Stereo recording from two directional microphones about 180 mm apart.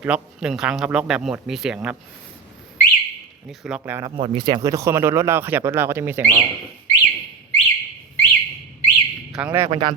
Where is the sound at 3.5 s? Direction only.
5° right (ahead or behind).